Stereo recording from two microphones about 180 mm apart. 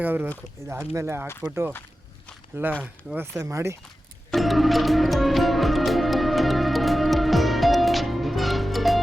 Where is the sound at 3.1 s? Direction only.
15° right (ahead or behind).